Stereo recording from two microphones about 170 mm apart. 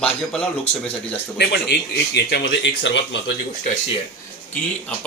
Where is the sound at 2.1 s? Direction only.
85° left.